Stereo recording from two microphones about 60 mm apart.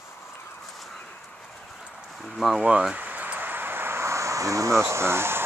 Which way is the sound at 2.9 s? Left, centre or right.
Right.